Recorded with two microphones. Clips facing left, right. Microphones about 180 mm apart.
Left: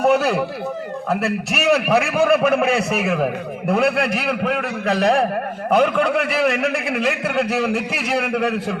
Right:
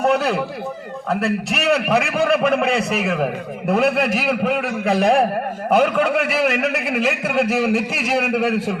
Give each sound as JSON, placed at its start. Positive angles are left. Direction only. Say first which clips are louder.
{"t": 0.0, "sound": "a man's voice", "louder": "left 2 dB", "side_deg": 0}